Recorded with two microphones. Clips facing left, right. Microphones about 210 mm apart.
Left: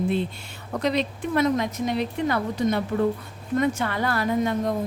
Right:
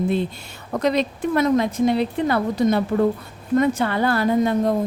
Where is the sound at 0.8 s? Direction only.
45° right (ahead or behind).